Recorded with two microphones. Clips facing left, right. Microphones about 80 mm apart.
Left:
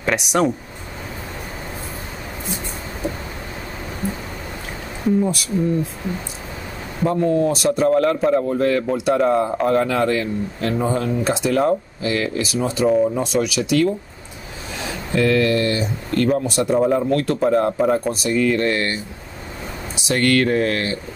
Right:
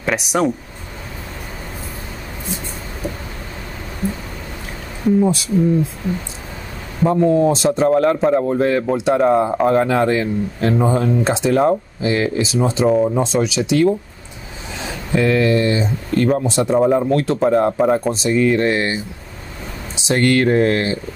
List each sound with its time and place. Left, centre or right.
0.0 s speech: centre
5.2 s a man's voice: right
7.1 s a man's voice: centre